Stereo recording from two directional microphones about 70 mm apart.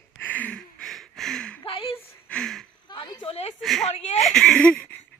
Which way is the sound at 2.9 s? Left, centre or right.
Left.